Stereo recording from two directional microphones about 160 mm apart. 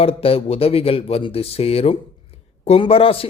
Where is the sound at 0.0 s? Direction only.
35° left (ahead or behind).